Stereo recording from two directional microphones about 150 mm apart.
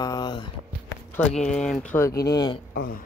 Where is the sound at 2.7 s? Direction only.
80° left.